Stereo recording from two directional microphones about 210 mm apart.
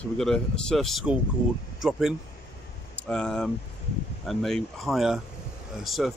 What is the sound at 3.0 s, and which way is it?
Speech, 5° left (ahead or behind).